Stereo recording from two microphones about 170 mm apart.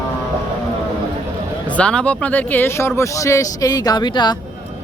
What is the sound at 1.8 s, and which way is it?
Speech, 5° left (ahead or behind).